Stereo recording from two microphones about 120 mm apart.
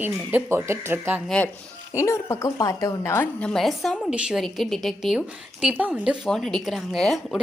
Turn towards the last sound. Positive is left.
turn(degrees=0)  # may be behind; listen again after turning